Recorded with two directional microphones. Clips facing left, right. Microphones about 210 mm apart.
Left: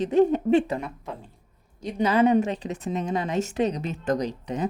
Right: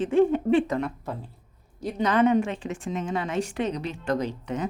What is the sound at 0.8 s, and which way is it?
Speech, 5° left (ahead or behind).